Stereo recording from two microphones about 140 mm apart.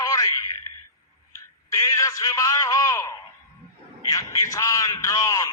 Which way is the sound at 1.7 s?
20° left (ahead or behind).